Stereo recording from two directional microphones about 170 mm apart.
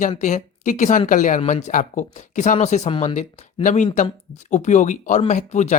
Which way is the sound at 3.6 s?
45° left (ahead or behind).